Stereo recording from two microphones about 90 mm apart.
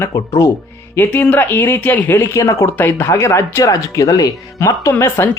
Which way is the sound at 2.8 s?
20° left (ahead or behind).